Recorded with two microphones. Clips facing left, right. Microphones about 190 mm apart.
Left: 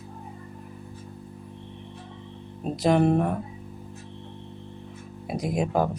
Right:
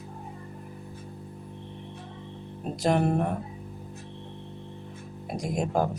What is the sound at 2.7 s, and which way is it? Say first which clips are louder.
Speech: left 4 dB; centre (ahead or behind).